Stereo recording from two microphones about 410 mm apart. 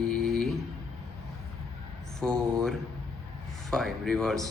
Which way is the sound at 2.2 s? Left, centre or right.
Centre.